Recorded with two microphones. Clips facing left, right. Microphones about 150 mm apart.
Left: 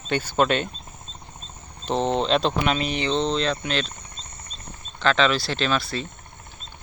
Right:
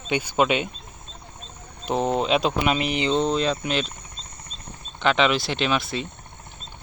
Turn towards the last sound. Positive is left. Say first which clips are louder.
# right 1 dB
turn(degrees=-20)  # may be behind; listen again after turning